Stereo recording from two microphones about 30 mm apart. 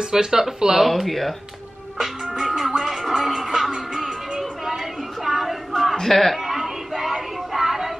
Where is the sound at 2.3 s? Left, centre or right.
Centre.